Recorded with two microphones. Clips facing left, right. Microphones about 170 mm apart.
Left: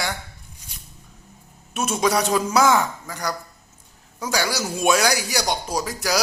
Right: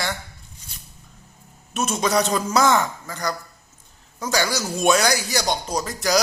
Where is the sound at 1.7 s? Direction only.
10° left (ahead or behind).